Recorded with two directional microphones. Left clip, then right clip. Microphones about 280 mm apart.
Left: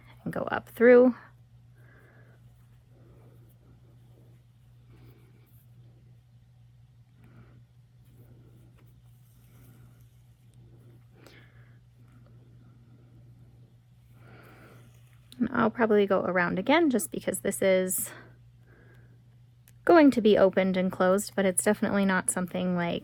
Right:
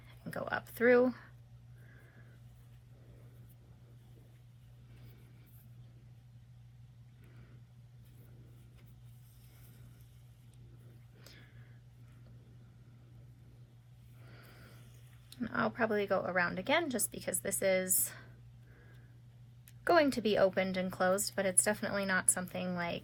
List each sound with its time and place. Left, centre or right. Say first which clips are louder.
0.3 s a woman's voice: left 7 dB; left
15.4 s a woman's voice: left 7 dB; left
19.8 s a woman's voice: left 9 dB; left